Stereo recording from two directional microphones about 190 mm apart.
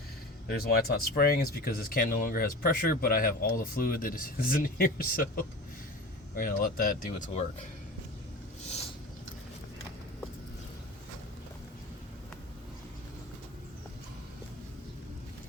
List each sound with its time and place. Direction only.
0.4 s speech: 55° left (ahead or behind)